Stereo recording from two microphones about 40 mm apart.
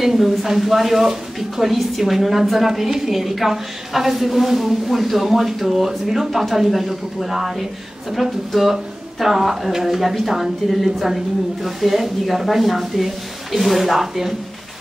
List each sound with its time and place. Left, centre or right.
0.0 s a woman's voice: centre